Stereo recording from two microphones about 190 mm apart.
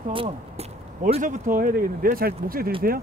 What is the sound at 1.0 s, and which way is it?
Speech, 40° right (ahead or behind).